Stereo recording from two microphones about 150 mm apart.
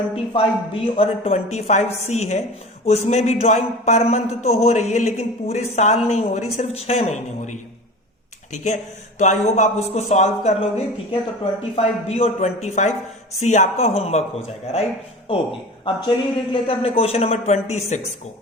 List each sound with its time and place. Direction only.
0.2 s speech: 40° left (ahead or behind)
15.8 s speech: 35° left (ahead or behind)